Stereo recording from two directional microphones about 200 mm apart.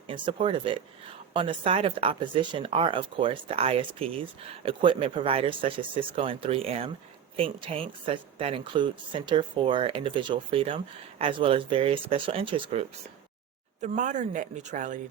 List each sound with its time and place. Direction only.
0.1 s speech: 25° right (ahead or behind)
13.8 s speech: 40° right (ahead or behind)